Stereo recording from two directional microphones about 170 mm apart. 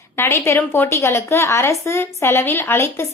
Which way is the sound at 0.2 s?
15° left (ahead or behind).